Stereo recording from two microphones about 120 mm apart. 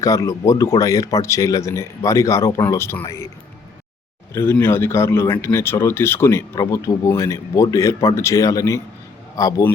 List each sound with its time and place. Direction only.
0.0 s speech: 30° left (ahead or behind)
4.4 s a man's voice: 20° left (ahead or behind)